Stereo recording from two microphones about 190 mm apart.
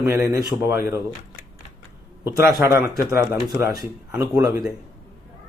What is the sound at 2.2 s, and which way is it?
Speech, 15° right (ahead or behind).